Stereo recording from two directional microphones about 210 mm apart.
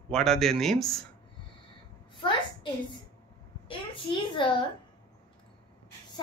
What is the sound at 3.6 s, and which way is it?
Speech, 25° left (ahead or behind).